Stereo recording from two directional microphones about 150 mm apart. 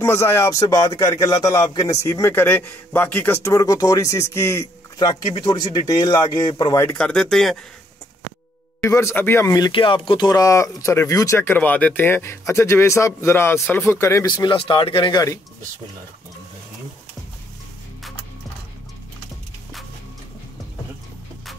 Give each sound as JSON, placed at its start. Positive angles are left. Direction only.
{"t": 0.0, "sound": "speech", "side_deg": 15}
{"t": 5.0, "sound": "speech", "side_deg": 30}
{"t": 6.8, "sound": "speech", "side_deg": 10}
{"t": 8.8, "sound": "speech", "side_deg": 15}